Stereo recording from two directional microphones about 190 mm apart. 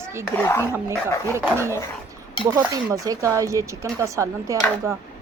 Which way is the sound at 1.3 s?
15° right (ahead or behind).